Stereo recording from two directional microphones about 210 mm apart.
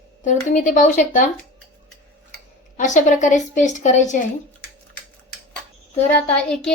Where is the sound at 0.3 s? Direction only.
35° left (ahead or behind).